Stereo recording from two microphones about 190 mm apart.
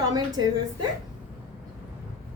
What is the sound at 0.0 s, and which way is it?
Speech, 20° right (ahead or behind).